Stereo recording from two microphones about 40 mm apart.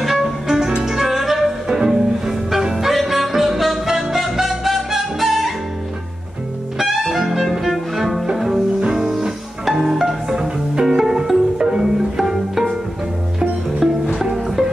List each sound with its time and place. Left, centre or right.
0.0 s music: centre
6.8 s music: centre
11.0 s music: centre
11.6 s pizzicato: centre
13.4 s music: centre
14.3 s music: centre